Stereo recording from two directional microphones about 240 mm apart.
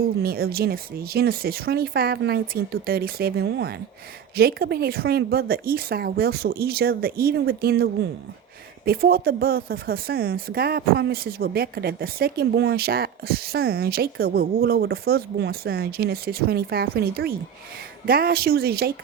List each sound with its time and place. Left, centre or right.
0.2 s speech: right